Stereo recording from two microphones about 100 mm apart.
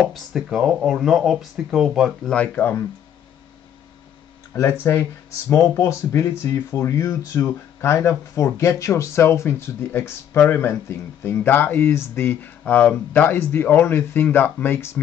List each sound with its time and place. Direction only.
0.1 s speech: centre (ahead or behind)
2.2 s speech: 15° left (ahead or behind)
4.6 s speech: 30° left (ahead or behind)